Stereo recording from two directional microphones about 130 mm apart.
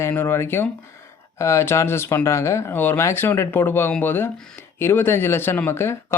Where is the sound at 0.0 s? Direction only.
15° left (ahead or behind).